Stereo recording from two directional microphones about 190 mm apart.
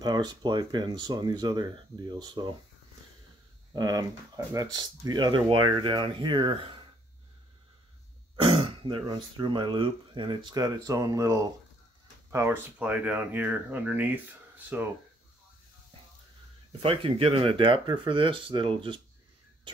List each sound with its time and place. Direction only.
0.0 s speech: 20° right (ahead or behind)
3.7 s speech: 20° right (ahead or behind)
8.4 s speech: 25° right (ahead or behind); by 14.9 s 10° right (ahead or behind)
16.8 s speech: 30° right (ahead or behind)